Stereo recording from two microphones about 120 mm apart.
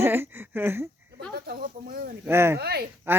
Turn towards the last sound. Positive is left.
turn(degrees=-20)  # may be behind; listen again after turning